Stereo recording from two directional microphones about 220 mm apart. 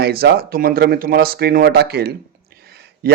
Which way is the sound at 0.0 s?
45° right (ahead or behind).